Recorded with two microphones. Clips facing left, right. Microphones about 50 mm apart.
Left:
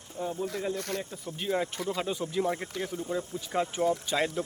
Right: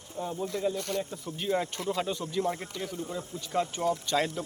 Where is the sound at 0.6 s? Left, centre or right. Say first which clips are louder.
Right 2 dB; centre.